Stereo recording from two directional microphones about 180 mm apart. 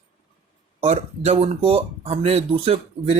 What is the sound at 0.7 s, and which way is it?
Speech, 40° right (ahead or behind).